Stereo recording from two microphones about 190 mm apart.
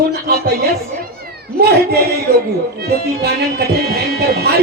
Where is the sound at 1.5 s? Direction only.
55° right (ahead or behind).